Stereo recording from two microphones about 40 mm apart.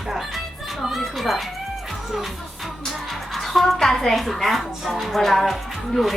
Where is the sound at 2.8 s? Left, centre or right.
Centre.